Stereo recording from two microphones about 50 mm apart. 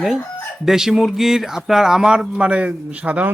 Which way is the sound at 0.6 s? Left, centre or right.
Centre.